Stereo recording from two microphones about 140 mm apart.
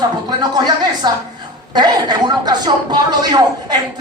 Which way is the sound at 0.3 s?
30° right (ahead or behind).